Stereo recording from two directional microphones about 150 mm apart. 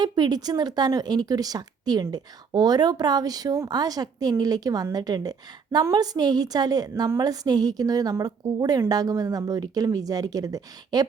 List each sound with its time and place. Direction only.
0.0 s speech: 25° right (ahead or behind)